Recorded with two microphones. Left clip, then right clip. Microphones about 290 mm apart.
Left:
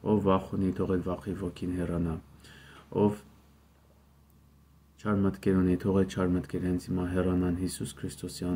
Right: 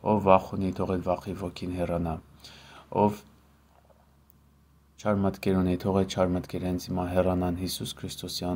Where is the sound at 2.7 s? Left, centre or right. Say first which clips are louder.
Right 3 dB; right.